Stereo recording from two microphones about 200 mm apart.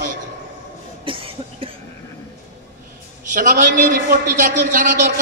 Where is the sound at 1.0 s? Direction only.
25° right (ahead or behind).